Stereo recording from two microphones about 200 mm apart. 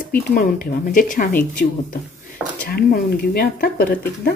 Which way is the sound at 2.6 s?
50° left (ahead or behind).